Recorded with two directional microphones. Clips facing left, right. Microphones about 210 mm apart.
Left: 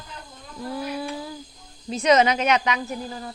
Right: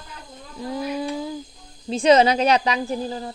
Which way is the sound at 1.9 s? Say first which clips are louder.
Right 3 dB; 30° right (ahead or behind).